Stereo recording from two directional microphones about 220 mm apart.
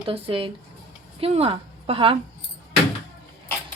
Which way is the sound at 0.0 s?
25° right (ahead or behind).